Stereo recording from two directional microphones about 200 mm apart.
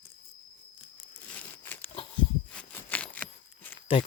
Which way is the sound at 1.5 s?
10° left (ahead or behind).